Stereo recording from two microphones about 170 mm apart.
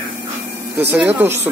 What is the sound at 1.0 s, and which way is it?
Speech, 10° right (ahead or behind).